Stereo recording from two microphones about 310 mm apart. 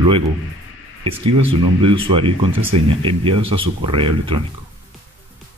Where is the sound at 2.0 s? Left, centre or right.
Centre.